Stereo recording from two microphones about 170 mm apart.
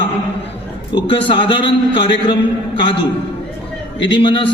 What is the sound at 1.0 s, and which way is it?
A man's voice, 30° left (ahead or behind).